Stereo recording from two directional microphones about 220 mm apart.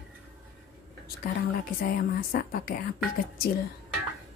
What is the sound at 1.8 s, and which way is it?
Speech, 40° left (ahead or behind).